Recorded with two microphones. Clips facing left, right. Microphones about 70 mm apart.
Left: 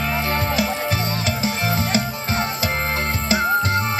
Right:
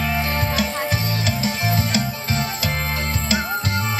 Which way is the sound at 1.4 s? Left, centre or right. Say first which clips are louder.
Left 1 dB; left.